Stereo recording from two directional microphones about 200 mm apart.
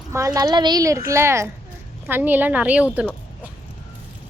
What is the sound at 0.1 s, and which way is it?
A woman's voice, 15° right (ahead or behind).